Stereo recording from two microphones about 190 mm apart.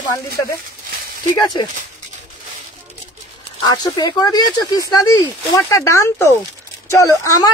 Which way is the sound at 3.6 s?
20° left (ahead or behind).